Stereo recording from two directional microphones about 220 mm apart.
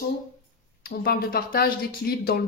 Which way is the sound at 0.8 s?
45° left (ahead or behind).